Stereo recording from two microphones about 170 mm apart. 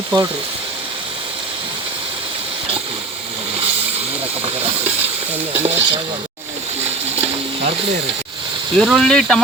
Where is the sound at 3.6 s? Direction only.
35° right (ahead or behind).